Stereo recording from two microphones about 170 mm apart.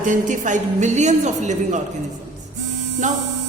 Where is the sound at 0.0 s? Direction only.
50° right (ahead or behind).